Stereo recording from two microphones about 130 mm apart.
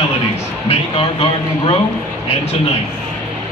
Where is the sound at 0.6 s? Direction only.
45° left (ahead or behind).